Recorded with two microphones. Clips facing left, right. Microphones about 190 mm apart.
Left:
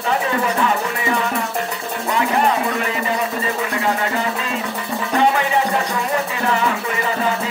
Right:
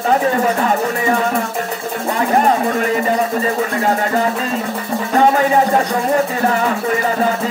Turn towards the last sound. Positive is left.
turn(degrees=-40)  # may be behind; listen again after turning